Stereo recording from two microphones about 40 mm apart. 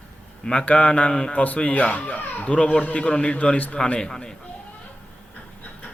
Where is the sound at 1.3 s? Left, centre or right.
Left.